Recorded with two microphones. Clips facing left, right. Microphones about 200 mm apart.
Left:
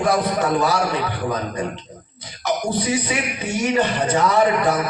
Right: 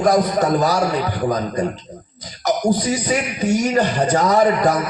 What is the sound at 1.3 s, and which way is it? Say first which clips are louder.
A man's voice: right 4 dB; 40° right (ahead or behind).